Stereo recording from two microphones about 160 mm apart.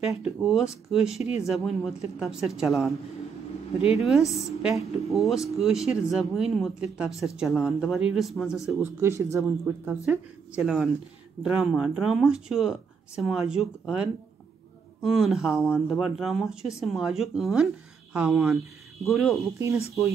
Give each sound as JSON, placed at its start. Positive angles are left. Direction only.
{"t": 0.1, "sound": "speech", "side_deg": 0}
{"t": 4.0, "sound": "speech", "side_deg": 0}
{"t": 9.0, "sound": "speech", "side_deg": -20}
{"t": 10.0, "sound": "speech", "side_deg": 0}